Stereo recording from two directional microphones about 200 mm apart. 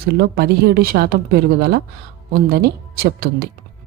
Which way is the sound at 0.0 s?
50° right (ahead or behind).